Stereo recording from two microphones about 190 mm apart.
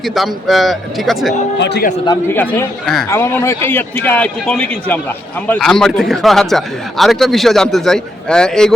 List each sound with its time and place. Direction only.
0.0 s speech: centre (ahead or behind)
1.5 s a man's voice: 60° left (ahead or behind)
2.2 s a man's voice: 10° left (ahead or behind)
3.1 s speech: 15° left (ahead or behind)